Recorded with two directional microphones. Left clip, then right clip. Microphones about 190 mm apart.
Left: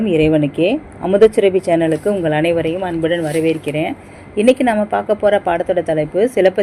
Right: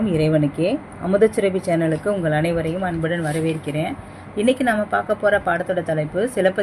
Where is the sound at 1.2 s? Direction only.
20° left (ahead or behind).